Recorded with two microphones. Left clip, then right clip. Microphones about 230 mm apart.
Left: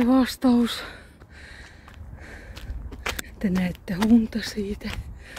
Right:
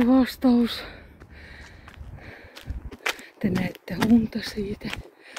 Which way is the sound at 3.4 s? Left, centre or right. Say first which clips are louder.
Even; centre.